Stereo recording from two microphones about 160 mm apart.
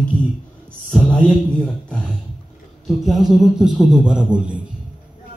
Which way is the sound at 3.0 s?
Centre (ahead or behind).